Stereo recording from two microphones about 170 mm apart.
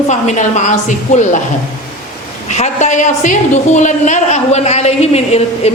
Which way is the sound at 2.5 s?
45° left (ahead or behind).